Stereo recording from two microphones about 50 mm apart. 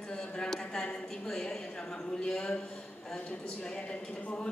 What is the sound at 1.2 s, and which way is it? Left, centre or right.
A woman's voice, centre.